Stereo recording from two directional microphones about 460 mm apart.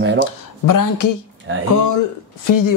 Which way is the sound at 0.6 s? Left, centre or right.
Left.